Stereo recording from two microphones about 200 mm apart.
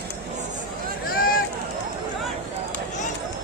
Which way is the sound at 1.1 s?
45° left (ahead or behind).